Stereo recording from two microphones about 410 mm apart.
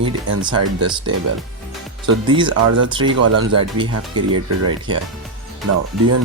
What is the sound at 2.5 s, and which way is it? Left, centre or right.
Speech, right.